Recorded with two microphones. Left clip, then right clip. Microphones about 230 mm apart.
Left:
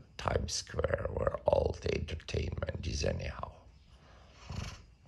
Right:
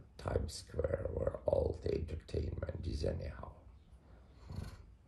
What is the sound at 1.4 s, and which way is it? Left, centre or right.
Speech, centre.